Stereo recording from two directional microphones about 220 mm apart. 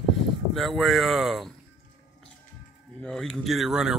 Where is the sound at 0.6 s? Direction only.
Centre (ahead or behind).